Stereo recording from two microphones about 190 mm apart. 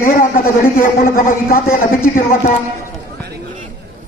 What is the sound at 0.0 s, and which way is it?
A man's voice, 50° left (ahead or behind).